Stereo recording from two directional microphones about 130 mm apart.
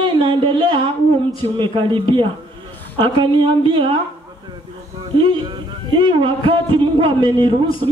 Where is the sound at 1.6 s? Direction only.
40° right (ahead or behind).